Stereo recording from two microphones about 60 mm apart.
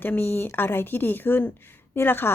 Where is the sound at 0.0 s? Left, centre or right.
Left.